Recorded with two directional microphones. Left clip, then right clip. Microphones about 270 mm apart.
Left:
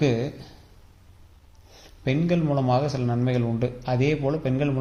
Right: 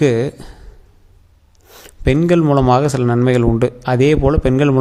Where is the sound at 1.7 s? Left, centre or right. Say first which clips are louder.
Right 11 dB; right.